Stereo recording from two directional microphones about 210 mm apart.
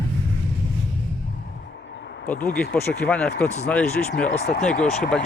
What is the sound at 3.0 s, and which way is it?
Speech, 5° left (ahead or behind).